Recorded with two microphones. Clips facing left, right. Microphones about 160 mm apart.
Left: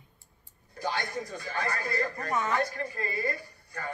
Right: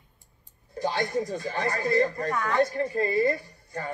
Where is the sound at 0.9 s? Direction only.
25° right (ahead or behind).